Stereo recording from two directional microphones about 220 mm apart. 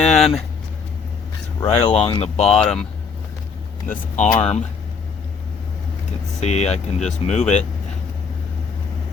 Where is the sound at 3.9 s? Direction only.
35° left (ahead or behind).